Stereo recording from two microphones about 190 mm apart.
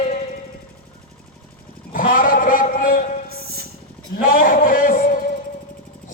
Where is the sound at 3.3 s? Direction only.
55° right (ahead or behind).